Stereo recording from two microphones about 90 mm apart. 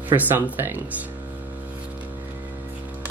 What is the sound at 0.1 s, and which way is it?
Speech, 25° right (ahead or behind).